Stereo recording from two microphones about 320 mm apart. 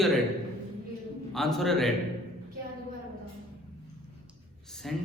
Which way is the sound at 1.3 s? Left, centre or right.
Centre.